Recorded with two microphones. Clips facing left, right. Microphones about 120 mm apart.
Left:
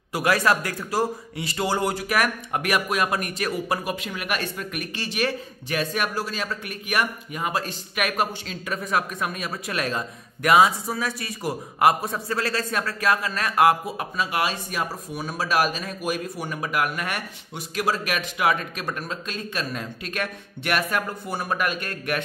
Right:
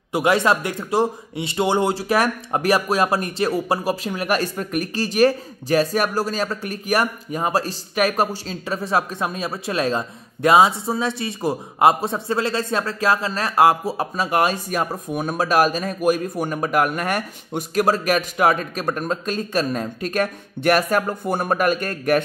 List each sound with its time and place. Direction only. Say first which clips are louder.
0.1 s a man's voice: right 3 dB; 25° right (ahead or behind); by 22.2 s 40° right (ahead or behind)